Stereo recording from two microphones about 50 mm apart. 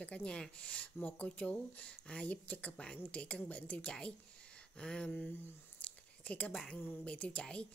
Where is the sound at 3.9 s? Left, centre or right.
Left.